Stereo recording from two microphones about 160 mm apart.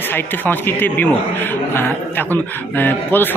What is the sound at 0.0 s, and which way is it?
Speech, 15° left (ahead or behind).